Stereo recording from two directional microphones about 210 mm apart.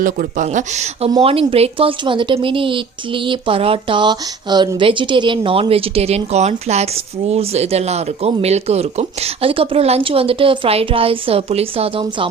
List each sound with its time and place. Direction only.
0.0 s speech: 40° right (ahead or behind)